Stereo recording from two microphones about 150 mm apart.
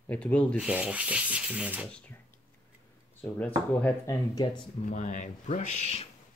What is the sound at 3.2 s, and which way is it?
Speech, 10° left (ahead or behind).